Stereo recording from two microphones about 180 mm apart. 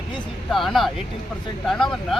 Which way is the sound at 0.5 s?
Centre (ahead or behind).